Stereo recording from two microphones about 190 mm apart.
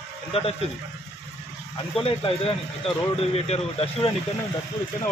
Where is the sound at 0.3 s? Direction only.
30° left (ahead or behind).